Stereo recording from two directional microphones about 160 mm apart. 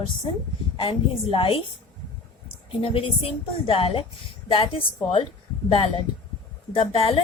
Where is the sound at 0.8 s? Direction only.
35° left (ahead or behind).